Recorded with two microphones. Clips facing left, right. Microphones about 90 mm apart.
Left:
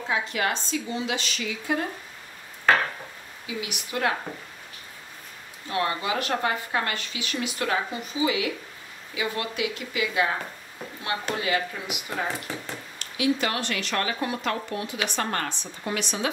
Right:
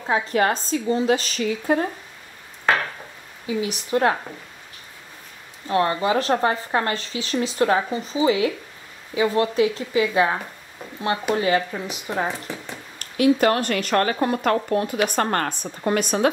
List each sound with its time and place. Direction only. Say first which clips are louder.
0.1 s speech: right 7 dB; 40° right (ahead or behind)
3.4 s speech: right 9 dB; 35° right (ahead or behind)
5.7 s speech: right 7 dB; 35° right (ahead or behind)
11.3 s speech: right 6 dB; 35° right (ahead or behind)
13.0 s speech: right 8 dB; 45° right (ahead or behind)